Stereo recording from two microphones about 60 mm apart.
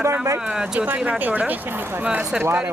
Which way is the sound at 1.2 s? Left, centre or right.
Right.